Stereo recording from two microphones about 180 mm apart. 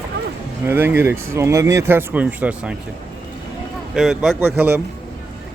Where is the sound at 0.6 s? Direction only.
10° right (ahead or behind).